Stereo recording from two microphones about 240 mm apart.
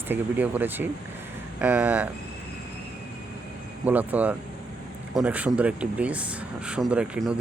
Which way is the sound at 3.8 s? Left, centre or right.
Centre.